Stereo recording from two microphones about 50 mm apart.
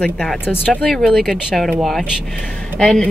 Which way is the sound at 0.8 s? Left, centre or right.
Centre.